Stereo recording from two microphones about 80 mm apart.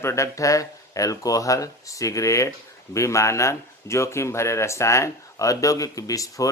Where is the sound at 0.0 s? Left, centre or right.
Left.